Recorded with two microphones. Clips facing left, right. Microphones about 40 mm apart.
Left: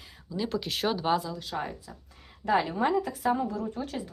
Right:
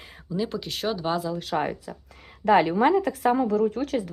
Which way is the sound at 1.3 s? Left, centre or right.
Right.